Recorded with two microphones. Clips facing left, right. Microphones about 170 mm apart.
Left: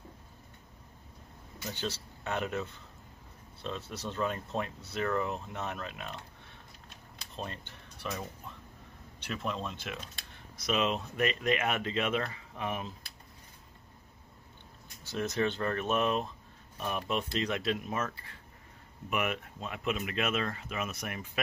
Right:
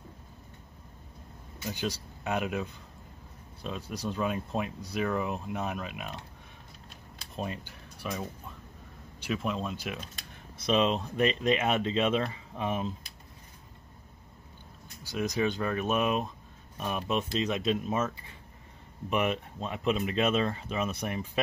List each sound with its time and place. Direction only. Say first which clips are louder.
1.7 s speech: right 3 dB; 15° right (ahead or behind)
7.3 s speech: right 5 dB; 10° right (ahead or behind)
10.6 s speech: right 4 dB; 30° right (ahead or behind)
15.0 s speech: right 2 dB; 15° right (ahead or behind); by 21.3 s 30° right (ahead or behind)